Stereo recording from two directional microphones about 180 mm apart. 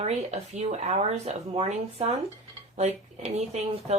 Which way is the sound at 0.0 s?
35° right (ahead or behind).